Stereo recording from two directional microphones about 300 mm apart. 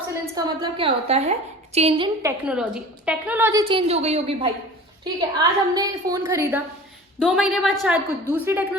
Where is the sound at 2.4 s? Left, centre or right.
Centre.